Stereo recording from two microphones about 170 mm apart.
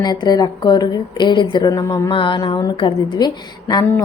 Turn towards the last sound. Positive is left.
turn(degrees=25)  # may be behind; listen again after turning